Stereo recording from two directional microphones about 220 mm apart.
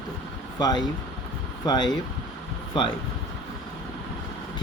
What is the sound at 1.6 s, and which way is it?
Speech, 20° left (ahead or behind).